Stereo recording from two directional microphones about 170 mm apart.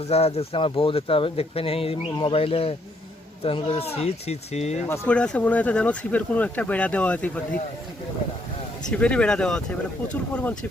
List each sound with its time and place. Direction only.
0.0 s speech: 35° left (ahead or behind)
4.9 s speech: 5° left (ahead or behind)
8.9 s speech: 5° left (ahead or behind)